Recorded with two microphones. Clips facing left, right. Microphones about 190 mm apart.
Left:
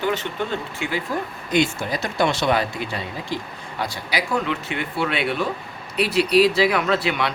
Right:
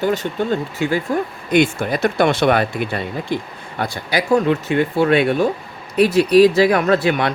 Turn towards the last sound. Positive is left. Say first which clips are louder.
# right 5 dB
turn(degrees=-45)  # may be behind; listen again after turning